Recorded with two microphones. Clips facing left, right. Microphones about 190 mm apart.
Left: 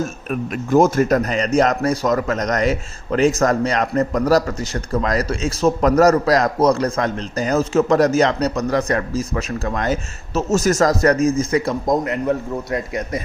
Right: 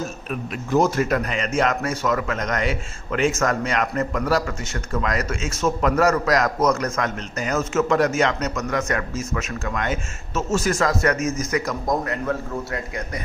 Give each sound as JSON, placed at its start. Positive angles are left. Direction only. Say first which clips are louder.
{"t": 0.0, "sound": "a man's voice", "louder": "left 5 dB", "side_deg": 50}